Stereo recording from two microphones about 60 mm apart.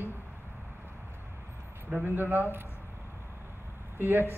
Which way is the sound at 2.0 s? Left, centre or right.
Right.